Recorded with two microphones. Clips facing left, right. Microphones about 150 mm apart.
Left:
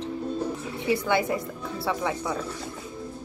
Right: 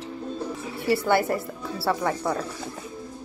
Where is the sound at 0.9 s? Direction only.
15° left (ahead or behind).